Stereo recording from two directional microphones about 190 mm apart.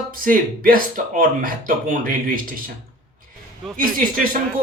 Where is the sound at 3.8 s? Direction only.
45° right (ahead or behind).